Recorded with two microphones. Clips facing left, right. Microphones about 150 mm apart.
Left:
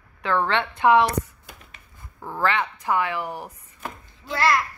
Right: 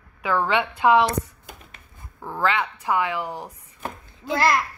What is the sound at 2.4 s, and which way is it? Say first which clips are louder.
A woman's voice: even; 10° right (ahead or behind).